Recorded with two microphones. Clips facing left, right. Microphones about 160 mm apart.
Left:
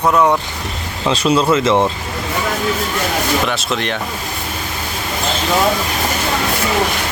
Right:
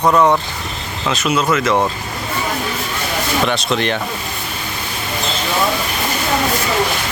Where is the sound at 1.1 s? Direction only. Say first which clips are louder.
Left 3 dB; 30° left (ahead or behind).